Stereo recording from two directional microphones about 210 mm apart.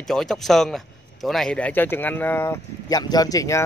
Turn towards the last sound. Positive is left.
turn(degrees=15)  # may be behind; listen again after turning